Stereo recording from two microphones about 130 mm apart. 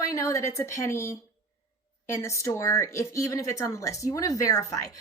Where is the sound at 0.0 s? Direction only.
25° left (ahead or behind).